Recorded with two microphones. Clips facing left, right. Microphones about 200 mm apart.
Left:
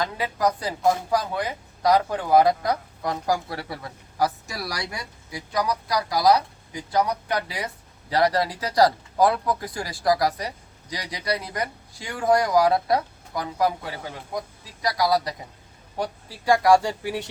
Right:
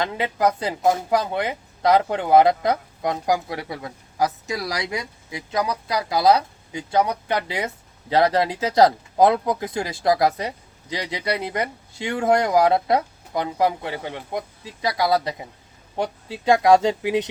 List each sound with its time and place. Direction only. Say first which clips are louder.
0.0 s a woman's voice: right 3 dB; 25° right (ahead or behind)